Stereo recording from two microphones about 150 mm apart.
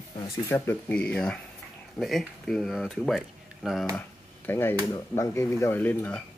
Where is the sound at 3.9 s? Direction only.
15° left (ahead or behind).